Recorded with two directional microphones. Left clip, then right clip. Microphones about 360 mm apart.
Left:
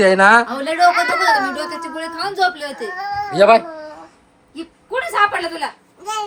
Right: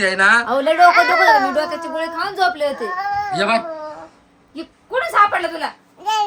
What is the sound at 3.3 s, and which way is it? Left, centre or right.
Speech, centre.